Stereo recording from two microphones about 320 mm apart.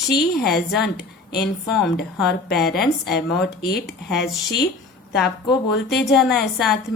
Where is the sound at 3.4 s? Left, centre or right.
Left.